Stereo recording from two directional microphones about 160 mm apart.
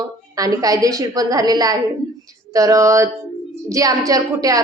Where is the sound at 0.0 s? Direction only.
20° right (ahead or behind).